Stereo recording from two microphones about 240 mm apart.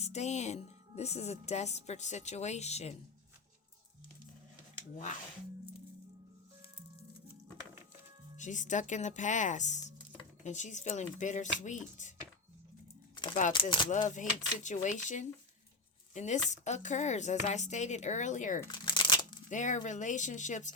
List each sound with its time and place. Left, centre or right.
0.0 s speech: left
8.4 s speech: left
13.5 s speech: centre
14.1 s speech: left
18.6 s crumpling: centre
19.5 s speech: left